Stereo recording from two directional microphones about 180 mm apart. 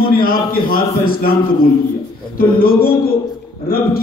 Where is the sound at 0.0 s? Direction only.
55° left (ahead or behind).